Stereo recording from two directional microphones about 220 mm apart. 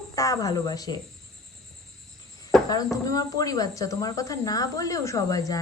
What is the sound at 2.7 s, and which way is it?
Speech, 15° left (ahead or behind).